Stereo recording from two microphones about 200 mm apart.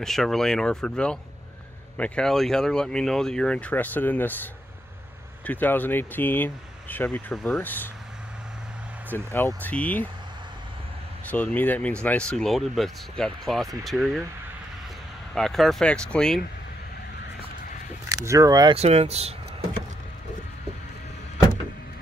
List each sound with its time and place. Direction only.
0.0 s speech: centre (ahead or behind)
5.4 s speech: 10° left (ahead or behind)
9.1 s speech: 10° left (ahead or behind)
11.2 s speech: 5° left (ahead or behind)
15.3 s speech: centre (ahead or behind)
18.1 s speech: 15° right (ahead or behind)
18.8 s speech: 30° right (ahead or behind)